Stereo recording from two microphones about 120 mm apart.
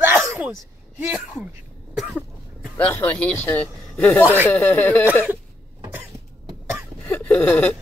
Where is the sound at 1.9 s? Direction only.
5° right (ahead or behind).